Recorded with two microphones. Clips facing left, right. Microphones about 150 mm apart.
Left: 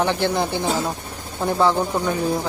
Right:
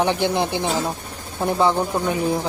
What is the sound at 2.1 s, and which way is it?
Speech, 15° right (ahead or behind).